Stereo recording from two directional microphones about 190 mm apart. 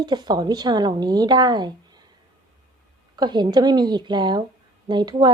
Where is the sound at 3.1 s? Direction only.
20° right (ahead or behind).